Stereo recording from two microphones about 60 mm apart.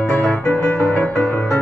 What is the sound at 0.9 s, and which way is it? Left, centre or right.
Music, centre.